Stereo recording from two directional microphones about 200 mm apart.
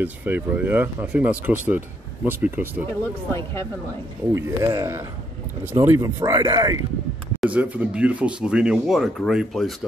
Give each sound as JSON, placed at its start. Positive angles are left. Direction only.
{"t": 0.0, "sound": "speech", "side_deg": -10}
{"t": 4.3, "sound": "speech", "side_deg": -15}
{"t": 7.3, "sound": "speech", "side_deg": -5}